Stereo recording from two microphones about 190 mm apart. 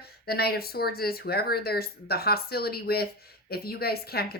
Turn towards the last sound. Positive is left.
turn(degrees=55)  # may be behind; listen again after turning